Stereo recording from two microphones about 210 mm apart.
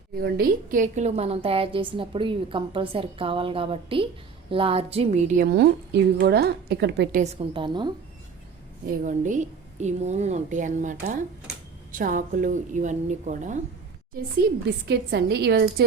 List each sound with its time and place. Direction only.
0.2 s a woman's voice: 50° right (ahead or behind)
7.2 s a woman's voice: 30° right (ahead or behind)
9.0 s a woman's voice: 35° right (ahead or behind)
14.4 s a woman's voice: 50° right (ahead or behind)